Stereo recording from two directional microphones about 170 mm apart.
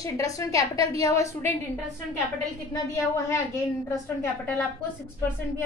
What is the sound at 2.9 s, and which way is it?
A woman's voice, 15° left (ahead or behind).